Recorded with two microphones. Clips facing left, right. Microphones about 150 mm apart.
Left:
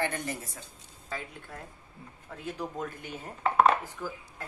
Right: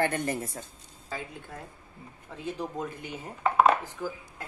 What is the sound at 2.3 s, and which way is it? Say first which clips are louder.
Speech: right 2 dB; centre (ahead or behind).